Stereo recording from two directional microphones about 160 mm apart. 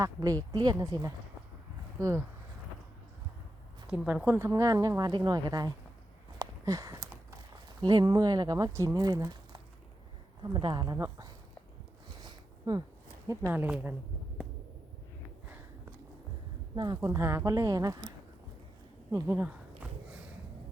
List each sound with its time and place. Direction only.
0.0 s a woman's voice: 20° right (ahead or behind)
3.8 s a woman's voice: 10° right (ahead or behind); by 5.7 s 25° right (ahead or behind)
6.4 s a sound: 20° right (ahead or behind)
7.8 s a woman's voice: 25° right (ahead or behind)
12.2 s a sound: 25° right (ahead or behind)
13.2 s speech: 15° right (ahead or behind)
16.7 s a woman's voice: 25° right (ahead or behind)
19.1 s a woman's voice: 20° right (ahead or behind)
19.5 s a sound: 10° right (ahead or behind)